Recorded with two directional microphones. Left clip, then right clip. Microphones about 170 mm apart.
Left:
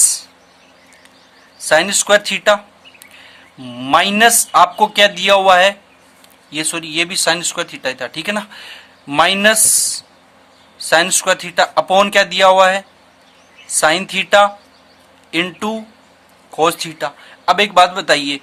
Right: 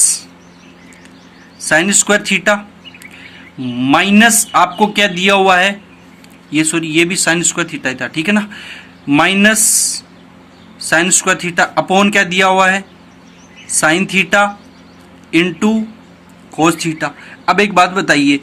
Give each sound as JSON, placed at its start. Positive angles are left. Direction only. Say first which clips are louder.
{"t": 0.0, "sound": "bird", "louder": "right 1 dB", "side_deg": 45}
{"t": 1.6, "sound": "speech", "louder": "right 1 dB", "side_deg": 45}
{"t": 3.7, "sound": "speech", "louder": "right 1 dB", "side_deg": 45}